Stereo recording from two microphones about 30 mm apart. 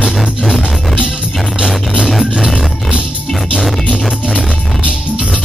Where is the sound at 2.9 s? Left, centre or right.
Right.